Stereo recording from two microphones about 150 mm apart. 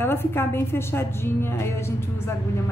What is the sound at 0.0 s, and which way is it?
A woman's voice, 15° left (ahead or behind).